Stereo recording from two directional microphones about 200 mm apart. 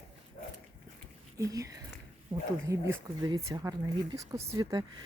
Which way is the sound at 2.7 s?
15° right (ahead or behind).